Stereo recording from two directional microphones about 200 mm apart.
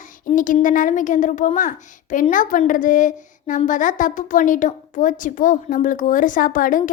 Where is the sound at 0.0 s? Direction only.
40° left (ahead or behind).